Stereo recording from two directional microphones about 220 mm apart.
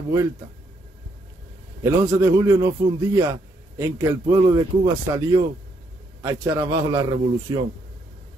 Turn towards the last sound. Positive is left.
turn(degrees=-20)  # may be behind; listen again after turning